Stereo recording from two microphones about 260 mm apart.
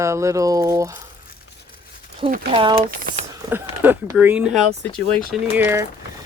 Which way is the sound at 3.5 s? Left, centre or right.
Centre.